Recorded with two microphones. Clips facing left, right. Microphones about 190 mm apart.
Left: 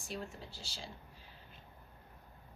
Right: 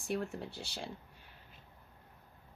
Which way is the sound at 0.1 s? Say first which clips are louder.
Right 7 dB; 60° right (ahead or behind).